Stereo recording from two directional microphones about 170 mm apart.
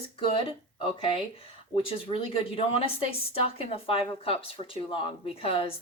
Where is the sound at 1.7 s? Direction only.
30° left (ahead or behind).